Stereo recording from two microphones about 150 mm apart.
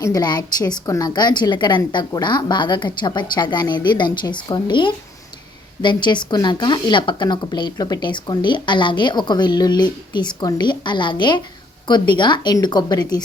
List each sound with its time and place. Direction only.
0.0 s a woman's voice: 25° left (ahead or behind)